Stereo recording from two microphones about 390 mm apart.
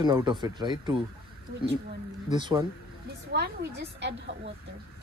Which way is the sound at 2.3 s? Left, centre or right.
Centre.